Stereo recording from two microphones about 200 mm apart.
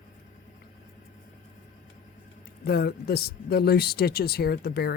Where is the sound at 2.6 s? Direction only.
55° left (ahead or behind).